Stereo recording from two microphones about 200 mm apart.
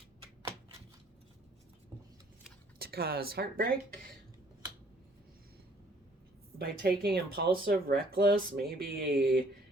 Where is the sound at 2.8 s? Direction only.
50° right (ahead or behind).